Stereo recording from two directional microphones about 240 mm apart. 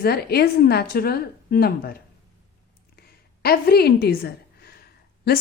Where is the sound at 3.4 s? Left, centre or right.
Left.